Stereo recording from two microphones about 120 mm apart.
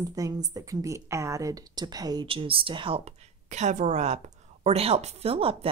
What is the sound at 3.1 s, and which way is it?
Speech, 75° right (ahead or behind).